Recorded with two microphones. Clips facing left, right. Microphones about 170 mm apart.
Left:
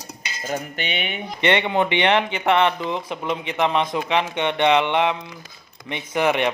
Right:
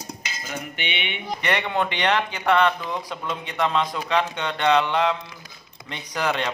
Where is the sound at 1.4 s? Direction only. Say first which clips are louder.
Left 5 dB; 25° left (ahead or behind).